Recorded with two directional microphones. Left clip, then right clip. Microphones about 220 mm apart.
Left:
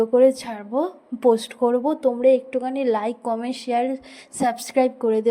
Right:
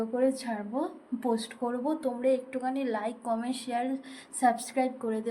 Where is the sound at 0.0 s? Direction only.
35° left (ahead or behind).